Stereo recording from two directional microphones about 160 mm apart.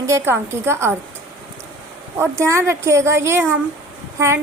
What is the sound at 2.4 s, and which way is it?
A woman's voice, 15° right (ahead or behind).